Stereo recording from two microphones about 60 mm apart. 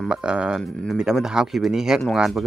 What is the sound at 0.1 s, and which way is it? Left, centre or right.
Speech, centre.